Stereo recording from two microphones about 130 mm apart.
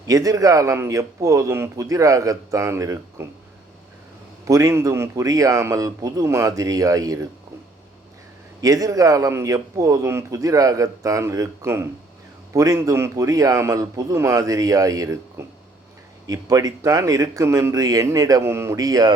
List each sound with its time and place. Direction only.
0.1 s a man's voice: 30° right (ahead or behind)
4.4 s a man's voice: 25° right (ahead or behind)
8.6 s a man's voice: 25° right (ahead or behind)